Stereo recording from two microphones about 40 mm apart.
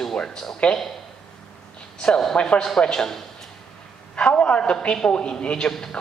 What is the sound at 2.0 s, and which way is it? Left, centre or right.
A man's voice, centre.